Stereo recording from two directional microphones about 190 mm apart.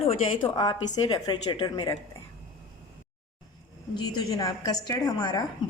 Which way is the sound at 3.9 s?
20° left (ahead or behind).